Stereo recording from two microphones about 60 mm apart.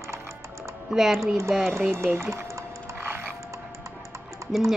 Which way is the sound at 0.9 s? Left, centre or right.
Centre.